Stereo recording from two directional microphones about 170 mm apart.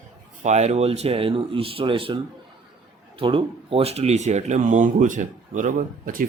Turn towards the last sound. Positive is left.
turn(degrees=-50)  # may be behind; listen again after turning